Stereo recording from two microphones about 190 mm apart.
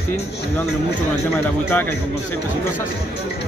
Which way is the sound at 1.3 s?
10° left (ahead or behind).